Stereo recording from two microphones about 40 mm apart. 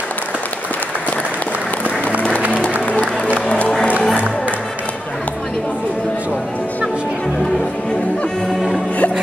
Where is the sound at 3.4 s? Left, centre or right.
Left.